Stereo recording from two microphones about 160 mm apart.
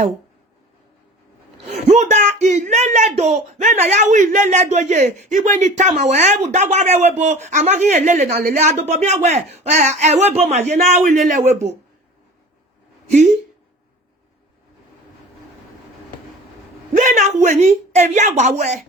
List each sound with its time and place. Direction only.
1.6 s speech: 45° right (ahead or behind)
16.9 s a woman's voice: 55° right (ahead or behind)